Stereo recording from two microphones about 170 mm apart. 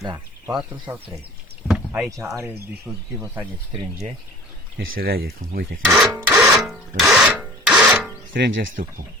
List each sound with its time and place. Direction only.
0.0 s speech: 20° right (ahead or behind)
1.6 s rowboat: 5° right (ahead or behind)
2.0 s speech: 20° right (ahead or behind)
4.9 s speech: 65° right (ahead or behind)
5.9 s rub: centre (ahead or behind)
8.3 s speech: 75° right (ahead or behind)